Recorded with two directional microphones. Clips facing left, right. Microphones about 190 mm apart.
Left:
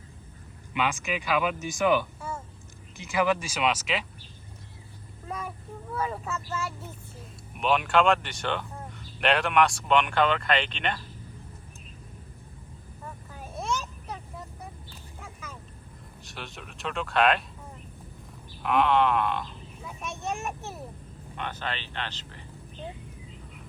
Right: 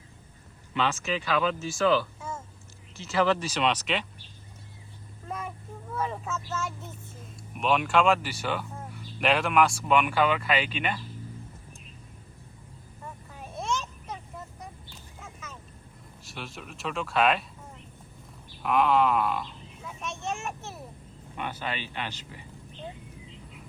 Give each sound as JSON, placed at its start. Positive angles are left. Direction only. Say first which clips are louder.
{"t": 0.7, "sound": "speech", "louder": "right 1 dB", "side_deg": 15}
{"t": 5.3, "sound": "speech", "louder": "even", "side_deg": 0}
{"t": 13.3, "sound": "a sound", "louder": "even", "side_deg": 5}
{"t": 16.2, "sound": "speech", "louder": "right 1 dB", "side_deg": 0}
{"t": 18.6, "sound": "speech", "louder": "even", "side_deg": 0}
{"t": 20.1, "sound": "speech", "louder": "left 2 dB", "side_deg": 15}
{"t": 21.3, "sound": "speech", "louder": "right 1 dB", "side_deg": -10}